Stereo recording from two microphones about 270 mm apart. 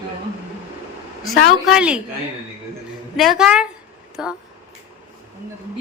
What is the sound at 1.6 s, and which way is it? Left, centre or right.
Speech, centre.